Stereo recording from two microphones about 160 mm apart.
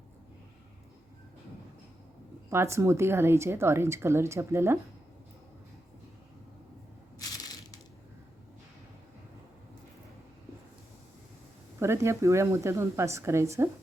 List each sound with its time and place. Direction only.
2.5 s a woman's voice: 15° right (ahead or behind)
7.2 s crushing: 25° left (ahead or behind)
11.8 s a woman's voice: 15° right (ahead or behind)